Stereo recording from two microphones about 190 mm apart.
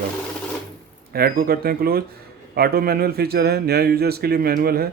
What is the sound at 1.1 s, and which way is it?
A man's voice, 50° right (ahead or behind).